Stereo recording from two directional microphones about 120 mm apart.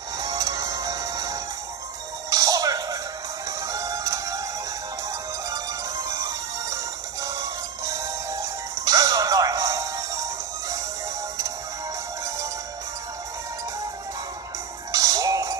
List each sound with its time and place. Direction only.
0.2 s music: 30° right (ahead or behind)
5.5 s music: 30° right (ahead or behind)
14.9 s music: 30° right (ahead or behind)